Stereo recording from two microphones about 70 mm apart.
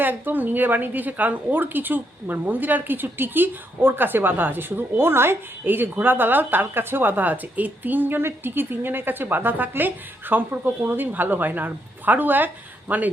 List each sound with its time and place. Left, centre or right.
0.0 s a woman's voice: right